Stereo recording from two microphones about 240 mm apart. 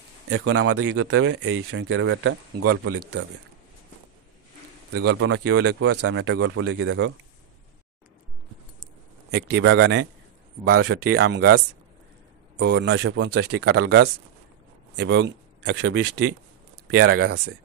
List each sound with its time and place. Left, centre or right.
0.3 s speech: right
5.2 s speech: right
9.3 s speech: right
11.1 s speech: right